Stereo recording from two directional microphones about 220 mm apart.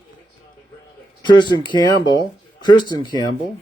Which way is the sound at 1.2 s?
20° left (ahead or behind).